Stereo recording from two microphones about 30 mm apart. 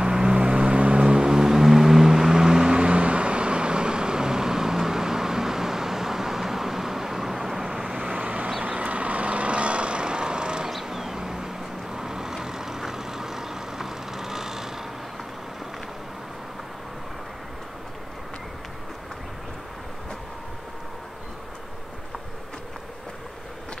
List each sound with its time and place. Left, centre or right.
0.0 s vehicle: right
1.0 s vehicle: right
8.1 s vehicle: right
10.9 s vehicle: centre